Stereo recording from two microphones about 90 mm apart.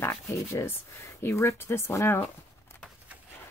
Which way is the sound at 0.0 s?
30° left (ahead or behind).